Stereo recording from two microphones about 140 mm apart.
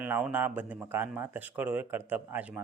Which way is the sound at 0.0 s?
10° right (ahead or behind).